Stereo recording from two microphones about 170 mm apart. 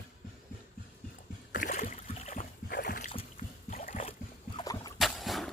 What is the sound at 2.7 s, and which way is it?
Boat, 60° left (ahead or behind).